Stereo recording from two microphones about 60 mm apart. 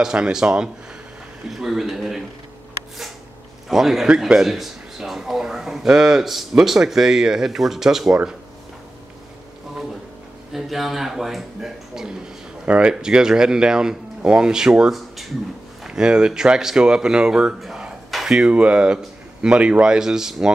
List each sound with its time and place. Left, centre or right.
0.0 s speech: centre
3.6 s a man's voice: centre
10.5 s speech: centre
12.6 s speech: centre
15.8 s speech: centre